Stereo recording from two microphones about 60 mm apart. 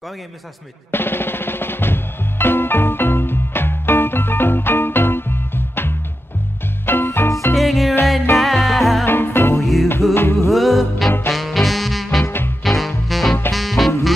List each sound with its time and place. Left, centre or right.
0.9 s music: left
7.5 s music: centre
9.0 s music: left
9.6 s music: centre
10.1 s music: left
10.5 s music: centre
12.3 s music: left
12.6 s music: centre